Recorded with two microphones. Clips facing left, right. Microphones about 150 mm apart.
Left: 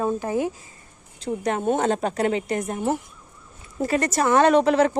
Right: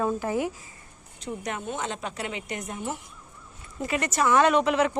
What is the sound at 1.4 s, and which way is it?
Speech, 45° left (ahead or behind).